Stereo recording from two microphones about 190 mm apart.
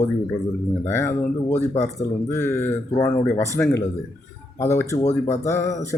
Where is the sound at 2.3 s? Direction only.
15° left (ahead or behind).